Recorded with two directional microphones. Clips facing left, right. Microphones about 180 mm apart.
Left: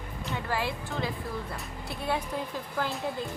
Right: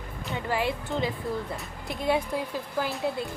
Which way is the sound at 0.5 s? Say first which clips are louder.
Right 5 dB; 20° right (ahead or behind).